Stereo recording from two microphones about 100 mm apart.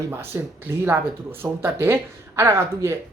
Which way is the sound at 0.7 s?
25° right (ahead or behind).